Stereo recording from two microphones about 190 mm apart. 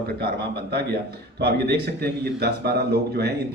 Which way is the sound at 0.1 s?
55° right (ahead or behind).